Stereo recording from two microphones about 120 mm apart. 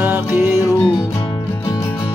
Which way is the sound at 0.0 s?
20° right (ahead or behind).